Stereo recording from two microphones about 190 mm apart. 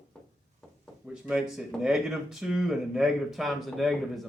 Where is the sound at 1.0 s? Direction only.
5° right (ahead or behind).